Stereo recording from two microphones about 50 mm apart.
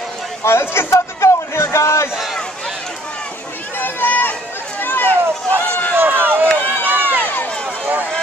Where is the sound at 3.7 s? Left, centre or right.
Left.